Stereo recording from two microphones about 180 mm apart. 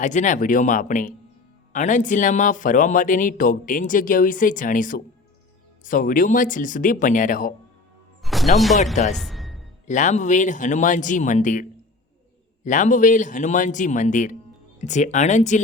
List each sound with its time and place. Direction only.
0.0 s speech: 45° left (ahead or behind)
8.2 s music: centre (ahead or behind)
8.5 s speech: centre (ahead or behind)
9.1 s music: centre (ahead or behind)
9.8 s speech: 40° left (ahead or behind)
12.6 s speech: 45° left (ahead or behind)